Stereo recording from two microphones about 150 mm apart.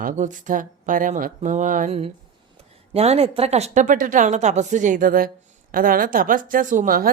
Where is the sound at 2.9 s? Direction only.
45° right (ahead or behind); by 7.1 s 70° right (ahead or behind).